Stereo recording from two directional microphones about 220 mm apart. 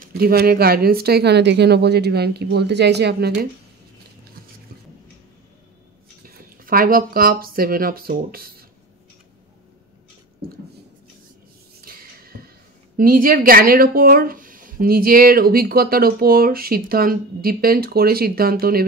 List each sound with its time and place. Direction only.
0.0 s speech: 45° right (ahead or behind)
6.2 s speech: 40° right (ahead or behind)
11.8 s a sound: 40° right (ahead or behind)
12.9 s speech: 40° right (ahead or behind)